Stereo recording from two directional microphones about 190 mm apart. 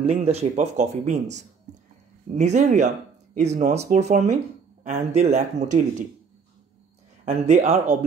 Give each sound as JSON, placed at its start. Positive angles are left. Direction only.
{"t": 0.0, "sound": "speech", "side_deg": -35}
{"t": 7.2, "sound": "speech", "side_deg": -35}